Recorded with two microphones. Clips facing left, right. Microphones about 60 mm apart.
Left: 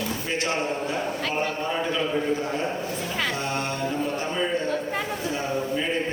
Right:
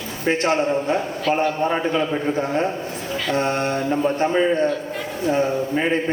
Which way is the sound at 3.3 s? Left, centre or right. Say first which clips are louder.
Right 7 dB; right.